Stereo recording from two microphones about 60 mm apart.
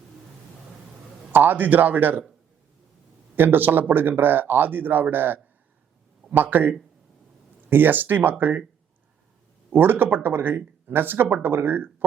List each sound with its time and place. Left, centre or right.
1.3 s speech: right
3.3 s speech: right
9.6 s speech: right